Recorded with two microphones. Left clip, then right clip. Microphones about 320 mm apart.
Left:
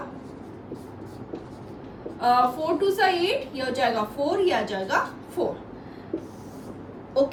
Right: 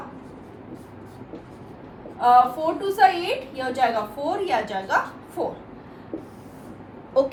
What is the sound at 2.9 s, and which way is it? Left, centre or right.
A woman's voice, centre.